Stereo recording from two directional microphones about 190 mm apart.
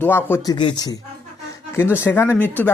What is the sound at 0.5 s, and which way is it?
Speech, 25° left (ahead or behind).